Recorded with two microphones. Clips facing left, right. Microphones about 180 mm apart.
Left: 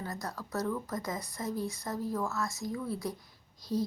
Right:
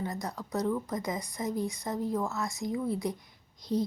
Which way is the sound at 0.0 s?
20° right (ahead or behind).